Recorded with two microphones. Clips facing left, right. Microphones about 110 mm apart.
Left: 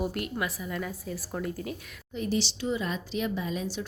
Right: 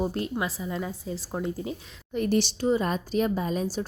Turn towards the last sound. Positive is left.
turn(degrees=-40)  # may be behind; listen again after turning